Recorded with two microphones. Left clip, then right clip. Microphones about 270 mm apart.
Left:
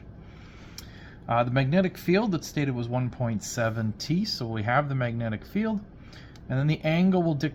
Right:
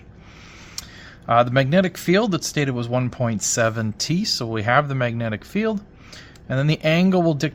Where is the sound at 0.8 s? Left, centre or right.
Right.